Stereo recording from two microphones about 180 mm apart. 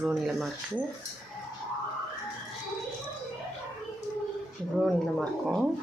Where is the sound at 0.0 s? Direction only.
Centre (ahead or behind).